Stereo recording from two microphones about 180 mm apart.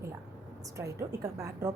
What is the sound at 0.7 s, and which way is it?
Speech, 15° right (ahead or behind).